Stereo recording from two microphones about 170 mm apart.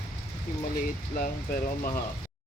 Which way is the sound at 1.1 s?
55° left (ahead or behind).